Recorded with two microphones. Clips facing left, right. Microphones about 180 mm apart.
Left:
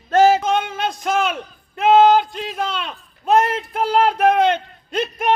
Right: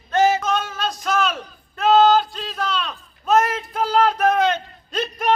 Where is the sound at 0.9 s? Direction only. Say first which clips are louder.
Left 2 dB; 55° left (ahead or behind).